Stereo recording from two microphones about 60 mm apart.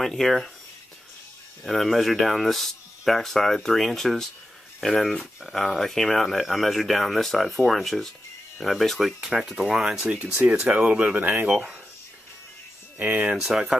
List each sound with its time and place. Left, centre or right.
0.0 s speech: centre
1.6 s speech: centre
9.3 s speech: centre
10.0 s speech: right
11.1 s speech: right
13.0 s speech: right
13.3 s speech: centre